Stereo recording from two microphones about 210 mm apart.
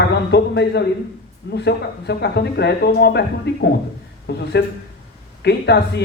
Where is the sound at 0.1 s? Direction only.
55° left (ahead or behind).